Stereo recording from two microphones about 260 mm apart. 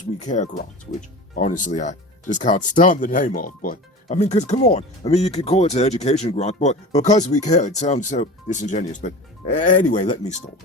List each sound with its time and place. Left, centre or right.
0.3 s speech: left